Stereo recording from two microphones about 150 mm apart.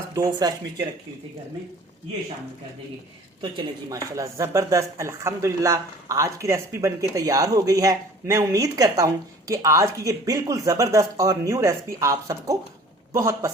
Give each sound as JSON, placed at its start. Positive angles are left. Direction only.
{"t": 0.1, "sound": "speech", "side_deg": -25}
{"t": 3.6, "sound": "speech", "side_deg": -25}